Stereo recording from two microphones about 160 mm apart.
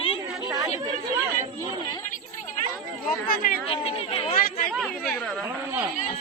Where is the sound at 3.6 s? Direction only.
35° left (ahead or behind).